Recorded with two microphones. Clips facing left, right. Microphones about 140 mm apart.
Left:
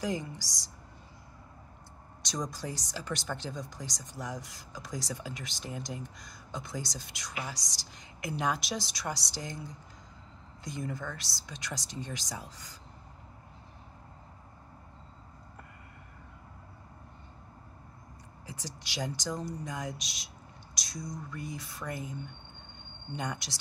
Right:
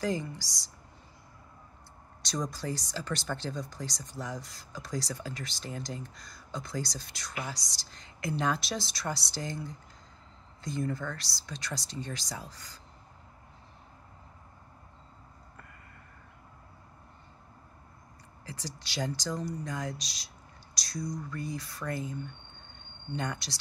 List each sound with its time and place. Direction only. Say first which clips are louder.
0.0 s speech: right 2 dB; 15° left (ahead or behind)
2.5 s speech: right 3 dB; 15° left (ahead or behind)
10.6 s speech: right 4 dB; 15° left (ahead or behind)
18.4 s speech: right 2 dB; 15° left (ahead or behind)
23.1 s speech: right 2 dB; 15° left (ahead or behind)